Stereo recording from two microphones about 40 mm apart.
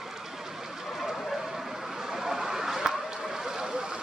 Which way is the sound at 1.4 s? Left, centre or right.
Centre.